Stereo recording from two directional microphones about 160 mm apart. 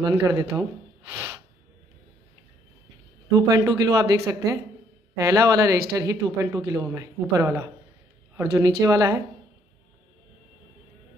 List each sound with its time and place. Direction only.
0.1 s speech: 20° right (ahead or behind)
1.1 s snort: 15° right (ahead or behind)
3.3 s speech: 20° right (ahead or behind)